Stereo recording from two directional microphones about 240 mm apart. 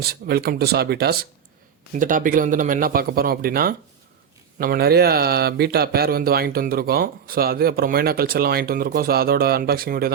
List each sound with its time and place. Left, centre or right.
0.0 s speech: right